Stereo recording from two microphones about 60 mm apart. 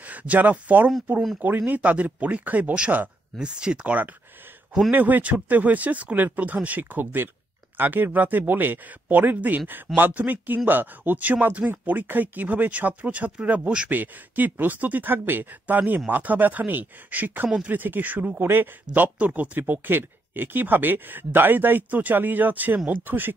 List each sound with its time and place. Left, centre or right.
0.0 s speech: right
13.8 s speech: right
18.4 s speech: right
19.1 s speech: right